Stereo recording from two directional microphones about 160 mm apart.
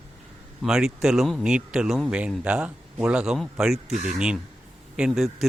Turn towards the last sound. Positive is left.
turn(degrees=0)  # may be behind; listen again after turning